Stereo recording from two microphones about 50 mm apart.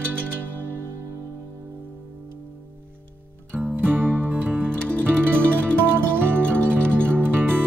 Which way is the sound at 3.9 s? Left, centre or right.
Centre.